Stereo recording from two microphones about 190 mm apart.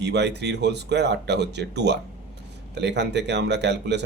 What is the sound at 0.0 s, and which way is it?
Speech, 65° right (ahead or behind).